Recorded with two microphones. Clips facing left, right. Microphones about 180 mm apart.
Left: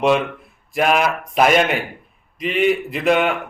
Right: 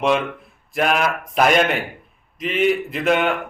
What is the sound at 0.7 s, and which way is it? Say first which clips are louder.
Speech: left 2 dB; centre (ahead or behind).